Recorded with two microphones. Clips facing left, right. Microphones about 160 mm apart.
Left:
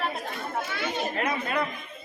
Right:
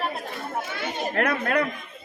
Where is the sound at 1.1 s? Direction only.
65° right (ahead or behind).